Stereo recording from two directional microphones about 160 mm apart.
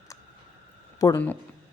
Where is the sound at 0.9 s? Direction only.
20° left (ahead or behind).